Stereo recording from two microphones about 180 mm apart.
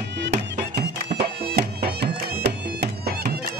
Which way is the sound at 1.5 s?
65° right (ahead or behind).